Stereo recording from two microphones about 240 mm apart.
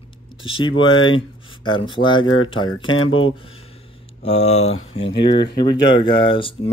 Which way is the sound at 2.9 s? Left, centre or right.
Left.